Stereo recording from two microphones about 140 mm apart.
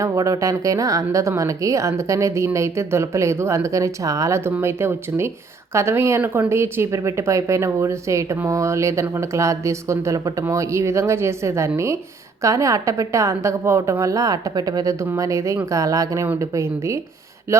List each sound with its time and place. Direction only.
0.0 s speech: 25° right (ahead or behind)